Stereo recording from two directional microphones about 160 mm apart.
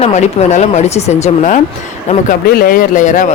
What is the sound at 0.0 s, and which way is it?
Speech, 45° left (ahead or behind).